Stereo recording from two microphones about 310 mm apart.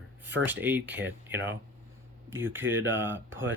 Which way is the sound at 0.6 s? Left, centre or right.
Centre.